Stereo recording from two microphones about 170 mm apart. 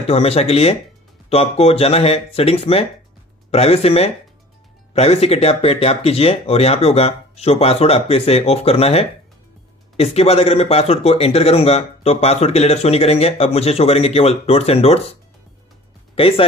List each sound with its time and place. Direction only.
0.0 s speech: 35° left (ahead or behind)
16.2 s speech: 35° left (ahead or behind)